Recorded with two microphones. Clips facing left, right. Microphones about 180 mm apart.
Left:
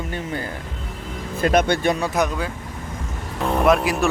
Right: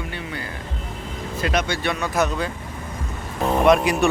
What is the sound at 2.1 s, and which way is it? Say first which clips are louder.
Speech: even; 10° left (ahead or behind).